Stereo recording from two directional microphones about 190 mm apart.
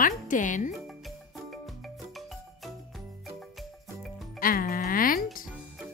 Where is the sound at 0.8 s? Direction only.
Centre (ahead or behind).